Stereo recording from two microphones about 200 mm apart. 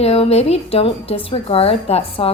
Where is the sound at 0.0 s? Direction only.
30° left (ahead or behind).